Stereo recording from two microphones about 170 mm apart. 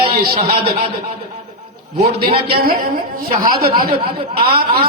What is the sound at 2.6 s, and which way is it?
Speech, 60° right (ahead or behind).